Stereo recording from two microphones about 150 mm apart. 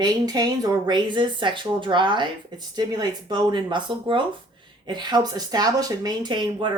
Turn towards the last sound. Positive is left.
turn(degrees=-30)  # may be behind; listen again after turning